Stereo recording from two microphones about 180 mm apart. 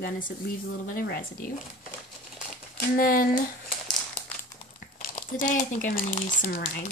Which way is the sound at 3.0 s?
50° left (ahead or behind).